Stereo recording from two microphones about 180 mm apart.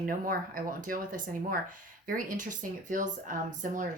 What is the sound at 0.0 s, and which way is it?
Speech, 50° right (ahead or behind).